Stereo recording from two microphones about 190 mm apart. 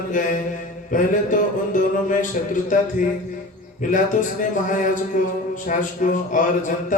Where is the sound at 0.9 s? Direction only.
45° left (ahead or behind).